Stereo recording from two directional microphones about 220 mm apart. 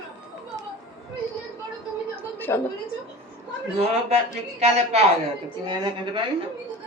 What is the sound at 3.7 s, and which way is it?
A man's voice, 30° right (ahead or behind).